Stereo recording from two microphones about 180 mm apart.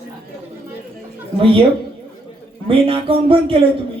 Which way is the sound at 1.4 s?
30° right (ahead or behind).